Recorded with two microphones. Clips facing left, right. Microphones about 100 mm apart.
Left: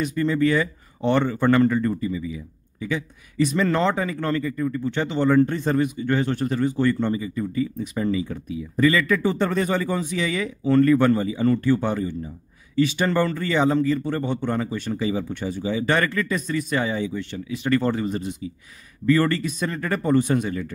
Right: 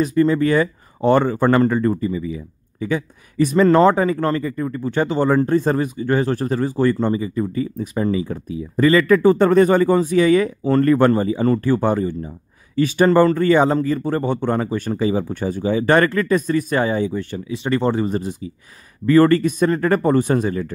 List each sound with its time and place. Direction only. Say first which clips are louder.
0.0 s speech: right 5 dB; 40° right (ahead or behind)
17.6 s speech: right 3 dB; 25° right (ahead or behind)